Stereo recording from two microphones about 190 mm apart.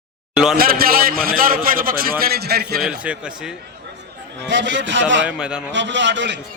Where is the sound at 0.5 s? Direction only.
50° right (ahead or behind).